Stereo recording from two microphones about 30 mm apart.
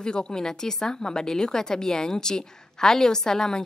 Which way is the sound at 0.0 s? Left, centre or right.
Left.